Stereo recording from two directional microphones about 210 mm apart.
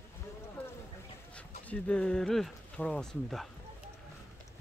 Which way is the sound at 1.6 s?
5° left (ahead or behind).